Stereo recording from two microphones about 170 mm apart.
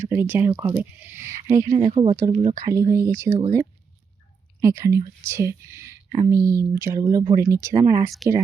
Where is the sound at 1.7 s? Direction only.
30° right (ahead or behind).